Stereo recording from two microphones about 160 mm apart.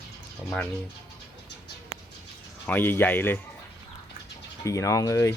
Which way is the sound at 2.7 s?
10° left (ahead or behind).